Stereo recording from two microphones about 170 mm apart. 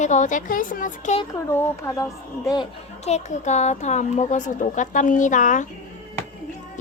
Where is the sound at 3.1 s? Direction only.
40° left (ahead or behind).